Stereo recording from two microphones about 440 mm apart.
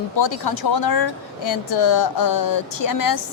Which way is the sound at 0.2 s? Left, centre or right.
Left.